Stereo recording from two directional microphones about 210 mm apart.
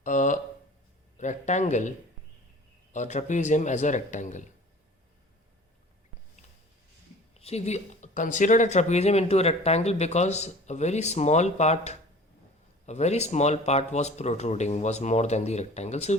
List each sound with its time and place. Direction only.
0.0 s speech: 35° left (ahead or behind)
2.9 s speech: 35° left (ahead or behind)
7.3 s speech: 30° left (ahead or behind)